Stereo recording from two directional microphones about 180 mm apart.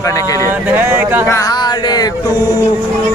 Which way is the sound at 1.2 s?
15° left (ahead or behind).